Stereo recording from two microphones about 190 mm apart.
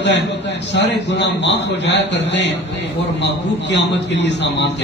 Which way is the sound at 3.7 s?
65° left (ahead or behind).